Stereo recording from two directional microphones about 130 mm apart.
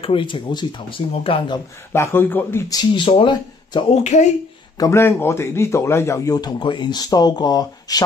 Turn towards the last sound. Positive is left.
turn(degrees=30)  # may be behind; listen again after turning